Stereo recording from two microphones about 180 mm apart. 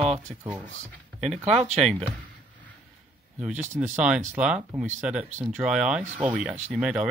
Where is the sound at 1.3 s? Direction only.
35° right (ahead or behind).